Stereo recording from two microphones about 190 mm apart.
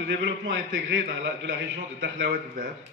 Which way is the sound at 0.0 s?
70° right (ahead or behind).